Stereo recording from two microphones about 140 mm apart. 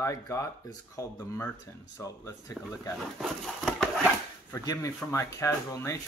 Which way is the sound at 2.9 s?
Centre (ahead or behind).